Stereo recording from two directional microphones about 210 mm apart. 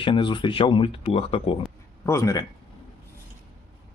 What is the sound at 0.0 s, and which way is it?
Speech, 25° left (ahead or behind).